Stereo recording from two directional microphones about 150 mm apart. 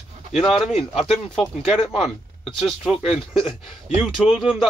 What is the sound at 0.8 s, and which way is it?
Speech, 35° left (ahead or behind).